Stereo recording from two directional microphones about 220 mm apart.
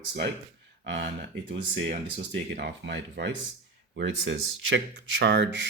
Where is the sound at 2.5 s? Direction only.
50° right (ahead or behind).